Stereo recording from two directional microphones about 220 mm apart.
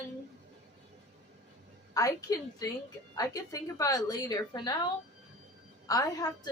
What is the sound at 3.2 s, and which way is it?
A woman's voice, 15° left (ahead or behind).